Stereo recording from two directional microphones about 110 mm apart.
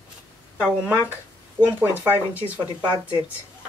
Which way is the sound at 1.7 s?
20° right (ahead or behind).